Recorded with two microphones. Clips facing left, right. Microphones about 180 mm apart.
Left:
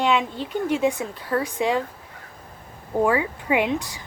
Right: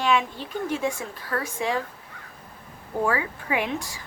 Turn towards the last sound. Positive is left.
turn(degrees=20)  # may be behind; listen again after turning